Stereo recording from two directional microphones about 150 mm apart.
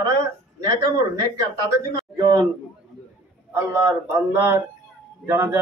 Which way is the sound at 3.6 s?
15° right (ahead or behind).